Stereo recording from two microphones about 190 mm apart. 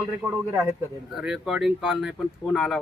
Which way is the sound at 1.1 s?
Centre (ahead or behind).